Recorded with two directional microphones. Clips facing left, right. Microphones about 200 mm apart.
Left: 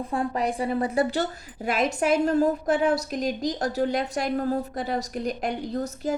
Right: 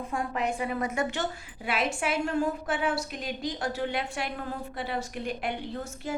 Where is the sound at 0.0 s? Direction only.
35° left (ahead or behind).